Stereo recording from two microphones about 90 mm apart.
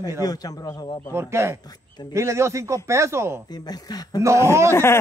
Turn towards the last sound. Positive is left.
turn(degrees=25)  # may be behind; listen again after turning